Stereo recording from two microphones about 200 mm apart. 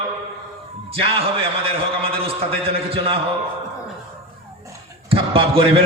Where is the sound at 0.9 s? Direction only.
30° right (ahead or behind).